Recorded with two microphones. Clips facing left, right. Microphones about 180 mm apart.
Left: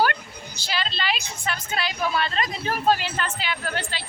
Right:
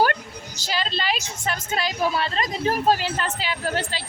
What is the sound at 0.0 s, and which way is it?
A woman's voice, 40° right (ahead or behind).